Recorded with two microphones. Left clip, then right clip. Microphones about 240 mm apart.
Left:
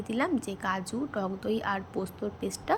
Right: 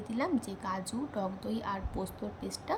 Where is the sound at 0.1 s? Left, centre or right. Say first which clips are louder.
Left 4 dB; centre.